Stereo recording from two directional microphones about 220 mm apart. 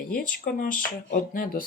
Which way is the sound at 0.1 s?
40° left (ahead or behind).